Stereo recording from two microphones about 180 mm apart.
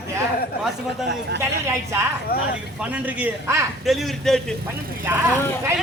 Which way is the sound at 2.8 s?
10° right (ahead or behind).